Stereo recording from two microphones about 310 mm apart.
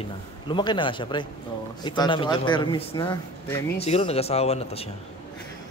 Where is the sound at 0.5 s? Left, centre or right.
Centre.